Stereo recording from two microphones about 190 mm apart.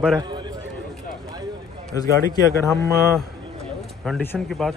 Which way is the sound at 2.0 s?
15° left (ahead or behind).